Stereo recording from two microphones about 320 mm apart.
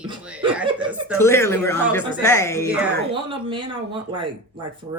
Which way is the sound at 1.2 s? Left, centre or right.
Centre.